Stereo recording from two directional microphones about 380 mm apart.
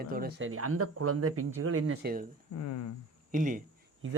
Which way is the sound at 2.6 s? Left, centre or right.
Left.